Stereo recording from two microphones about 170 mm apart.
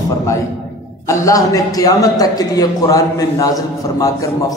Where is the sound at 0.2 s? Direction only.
15° left (ahead or behind).